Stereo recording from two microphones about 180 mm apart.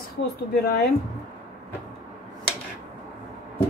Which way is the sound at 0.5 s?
60° left (ahead or behind).